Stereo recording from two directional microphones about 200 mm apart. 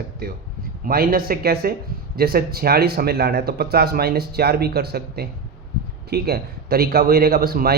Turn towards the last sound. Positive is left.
turn(degrees=-50)  # may be behind; listen again after turning